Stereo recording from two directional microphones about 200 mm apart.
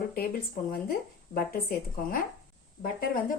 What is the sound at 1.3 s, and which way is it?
Speech, 50° left (ahead or behind).